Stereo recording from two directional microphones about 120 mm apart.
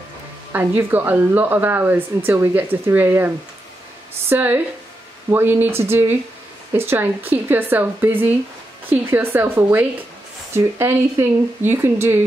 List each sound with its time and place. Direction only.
0.5 s speech: 15° right (ahead or behind)